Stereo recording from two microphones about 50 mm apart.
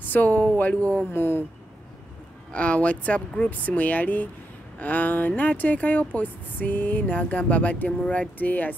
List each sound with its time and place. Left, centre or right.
0.0 s speech: left
1.1 s speech: left
2.5 s speech: left
8.4 s speech: left